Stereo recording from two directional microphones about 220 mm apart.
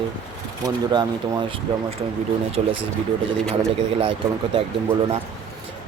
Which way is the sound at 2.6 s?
30° right (ahead or behind).